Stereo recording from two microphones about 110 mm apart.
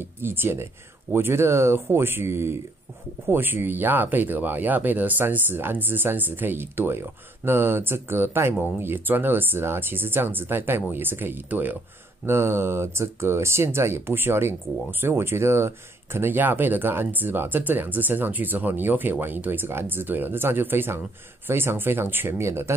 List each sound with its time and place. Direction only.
0.0 s speech: 20° right (ahead or behind)